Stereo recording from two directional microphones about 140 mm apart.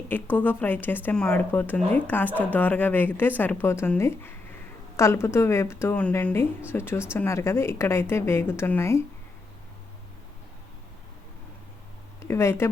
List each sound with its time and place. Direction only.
0.1 s a woman's voice: 10° left (ahead or behind)
12.2 s a woman's voice: 20° left (ahead or behind)